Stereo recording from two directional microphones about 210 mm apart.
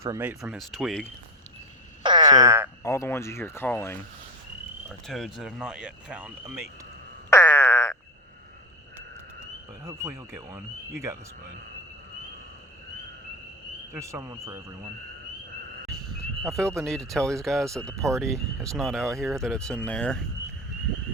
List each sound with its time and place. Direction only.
0.0 s speech: 10° right (ahead or behind)
2.0 s frog: 20° right (ahead or behind)
2.8 s speech: 15° left (ahead or behind)
5.0 s speech: centre (ahead or behind)
7.3 s frog: 10° left (ahead or behind)
9.8 s speech: 15° right (ahead or behind)
13.9 s speech: 15° right (ahead or behind)
16.6 s speech: centre (ahead or behind)
17.9 s speech: 15° right (ahead or behind)
18.3 s speech: centre (ahead or behind)